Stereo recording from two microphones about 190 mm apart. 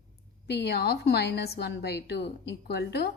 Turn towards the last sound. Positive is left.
turn(degrees=60)  # may be behind; listen again after turning